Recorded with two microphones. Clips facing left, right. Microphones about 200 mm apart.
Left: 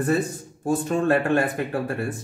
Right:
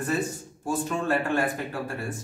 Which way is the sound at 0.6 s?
55° left (ahead or behind).